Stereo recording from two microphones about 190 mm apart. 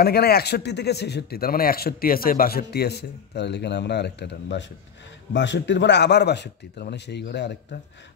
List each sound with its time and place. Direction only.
0.0 s a man's voice: 55° left (ahead or behind)